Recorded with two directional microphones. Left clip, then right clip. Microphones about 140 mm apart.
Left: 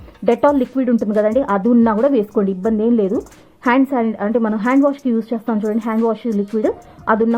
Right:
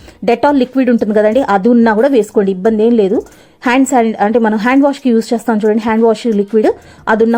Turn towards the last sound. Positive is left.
turn(degrees=-25)  # may be behind; listen again after turning